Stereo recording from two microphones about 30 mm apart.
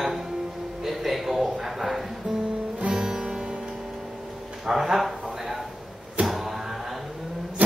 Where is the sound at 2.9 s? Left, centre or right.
Right.